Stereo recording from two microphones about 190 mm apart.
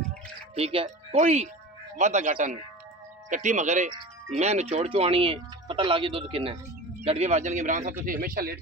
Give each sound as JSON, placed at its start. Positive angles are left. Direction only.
{"t": 0.6, "sound": "speech", "side_deg": -30}